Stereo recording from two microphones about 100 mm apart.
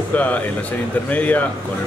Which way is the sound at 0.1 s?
15° left (ahead or behind).